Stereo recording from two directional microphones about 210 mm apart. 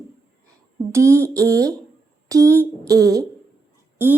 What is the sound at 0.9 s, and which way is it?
Speech, 15° right (ahead or behind).